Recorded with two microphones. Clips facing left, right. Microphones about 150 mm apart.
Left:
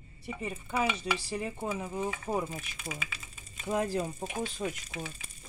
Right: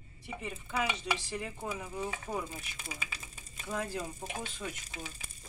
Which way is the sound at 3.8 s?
40° left (ahead or behind).